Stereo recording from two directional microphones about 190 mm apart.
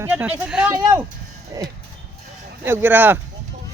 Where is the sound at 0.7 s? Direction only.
15° right (ahead or behind).